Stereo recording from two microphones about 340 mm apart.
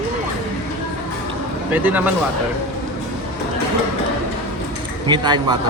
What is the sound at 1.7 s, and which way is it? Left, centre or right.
Speech, centre.